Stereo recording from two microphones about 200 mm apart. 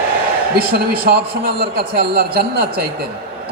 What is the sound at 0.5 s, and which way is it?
A man's voice, 50° right (ahead or behind).